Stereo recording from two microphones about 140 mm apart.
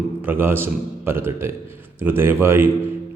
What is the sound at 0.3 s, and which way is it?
A man's voice, 15° right (ahead or behind).